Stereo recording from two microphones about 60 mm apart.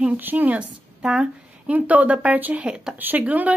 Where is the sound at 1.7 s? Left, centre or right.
Right.